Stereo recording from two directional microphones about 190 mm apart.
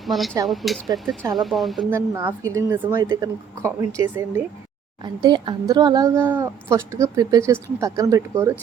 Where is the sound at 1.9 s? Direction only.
15° right (ahead or behind).